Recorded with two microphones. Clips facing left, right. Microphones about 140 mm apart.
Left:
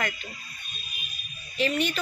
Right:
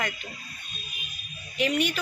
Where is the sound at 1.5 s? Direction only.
15° right (ahead or behind).